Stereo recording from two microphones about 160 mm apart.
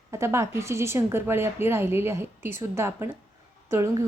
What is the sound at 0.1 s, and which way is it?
A woman's voice, 15° right (ahead or behind).